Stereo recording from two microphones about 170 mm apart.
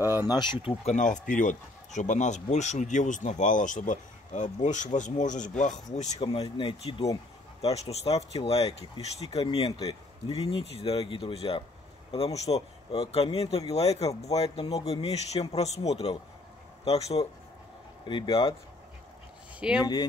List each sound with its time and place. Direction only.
0.3 s speech: 25° left (ahead or behind); by 5.8 s 45° left (ahead or behind)
6.1 s speech: 25° left (ahead or behind)
19.8 s speech: 30° left (ahead or behind)